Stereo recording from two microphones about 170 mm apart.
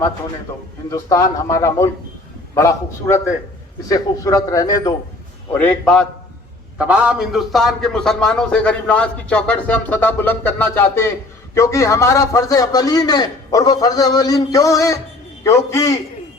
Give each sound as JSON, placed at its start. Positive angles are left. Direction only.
{"t": 0.9, "sound": "a man's voice", "side_deg": 20}
{"t": 5.5, "sound": "a man's voice", "side_deg": 10}
{"t": 6.7, "sound": "a man's voice", "side_deg": -10}